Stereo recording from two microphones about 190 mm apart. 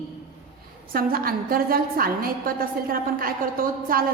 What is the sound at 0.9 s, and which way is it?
A woman's voice, 50° right (ahead or behind).